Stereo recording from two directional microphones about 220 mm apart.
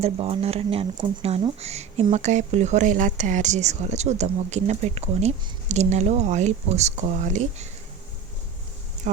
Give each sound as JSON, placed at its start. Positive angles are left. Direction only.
{"t": 0.0, "sound": "speech", "side_deg": -25}